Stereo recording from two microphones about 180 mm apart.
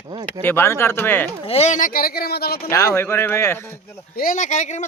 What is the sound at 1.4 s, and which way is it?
Speech, 35° left (ahead or behind).